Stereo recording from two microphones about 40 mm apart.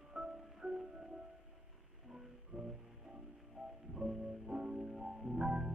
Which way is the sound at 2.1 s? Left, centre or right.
Centre.